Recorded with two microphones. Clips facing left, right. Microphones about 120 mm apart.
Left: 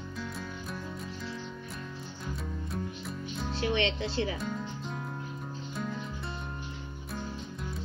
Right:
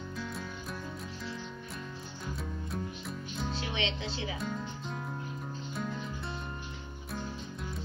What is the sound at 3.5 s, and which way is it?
Music, 20° right (ahead or behind).